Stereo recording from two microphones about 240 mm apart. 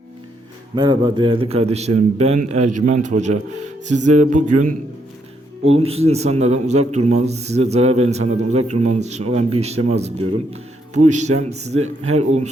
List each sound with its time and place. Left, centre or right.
0.8 s a man's voice: centre
5.7 s a man's voice: right